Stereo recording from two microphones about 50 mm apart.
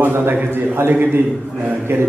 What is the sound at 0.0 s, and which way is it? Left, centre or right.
A man's voice, right.